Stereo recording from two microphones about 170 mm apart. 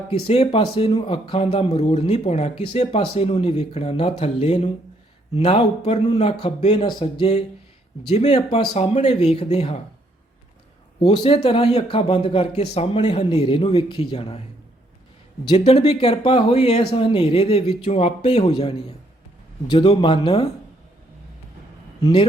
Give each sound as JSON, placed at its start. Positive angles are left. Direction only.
{"t": 0.1, "sound": "speech", "side_deg": 35}
{"t": 11.0, "sound": "speech", "side_deg": 30}
{"t": 15.4, "sound": "speech", "side_deg": 35}
{"t": 22.0, "sound": "speech", "side_deg": 30}